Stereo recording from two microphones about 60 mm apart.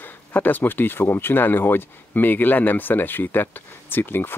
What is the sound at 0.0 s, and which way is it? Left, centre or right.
Speech, left.